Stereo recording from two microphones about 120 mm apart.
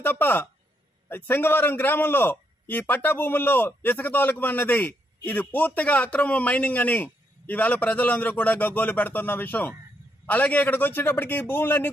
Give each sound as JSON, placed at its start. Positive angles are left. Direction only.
{"t": 0.0, "sound": "a man's voice", "side_deg": 15}